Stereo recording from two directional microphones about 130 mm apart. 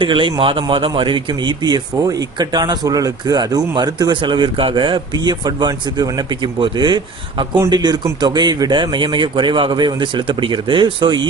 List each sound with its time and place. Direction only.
0.0 s speech: 40° right (ahead or behind)